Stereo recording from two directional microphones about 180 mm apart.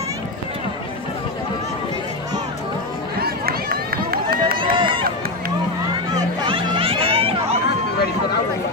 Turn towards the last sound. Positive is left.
turn(degrees=-30)  # may be behind; listen again after turning